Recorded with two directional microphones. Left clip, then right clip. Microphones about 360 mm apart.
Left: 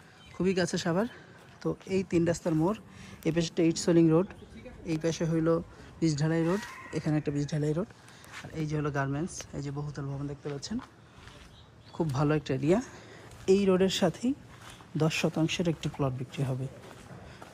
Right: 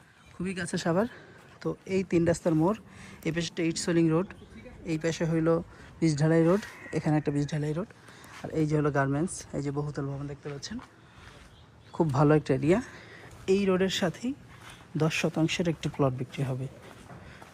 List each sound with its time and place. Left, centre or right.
0.3 s speech: centre
11.9 s speech: centre